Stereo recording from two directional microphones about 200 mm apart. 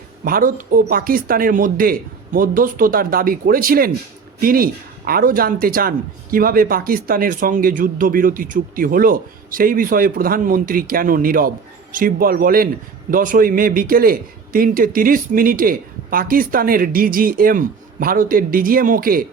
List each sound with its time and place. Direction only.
0.3 s speech: 45° right (ahead or behind)